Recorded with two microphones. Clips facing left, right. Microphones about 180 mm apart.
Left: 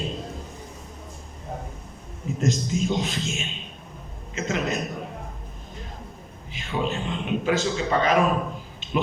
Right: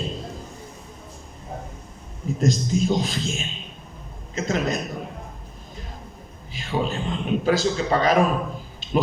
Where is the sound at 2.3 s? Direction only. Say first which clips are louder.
Right 3 dB; 35° right (ahead or behind).